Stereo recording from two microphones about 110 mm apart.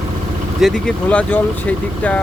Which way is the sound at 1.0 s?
15° left (ahead or behind).